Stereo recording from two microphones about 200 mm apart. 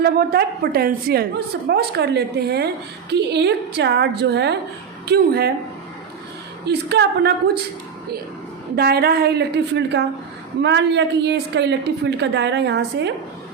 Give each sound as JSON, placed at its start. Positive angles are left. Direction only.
{"t": 0.0, "sound": "a woman's voice", "side_deg": -50}
{"t": 6.7, "sound": "a woman's voice", "side_deg": -55}
{"t": 8.7, "sound": "a woman's voice", "side_deg": -50}